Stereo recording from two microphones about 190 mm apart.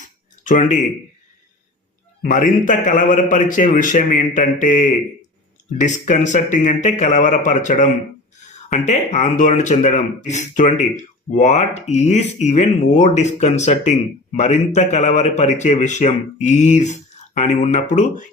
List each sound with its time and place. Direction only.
0.4 s speech: 40° left (ahead or behind)
2.2 s a man's voice: 45° left (ahead or behind)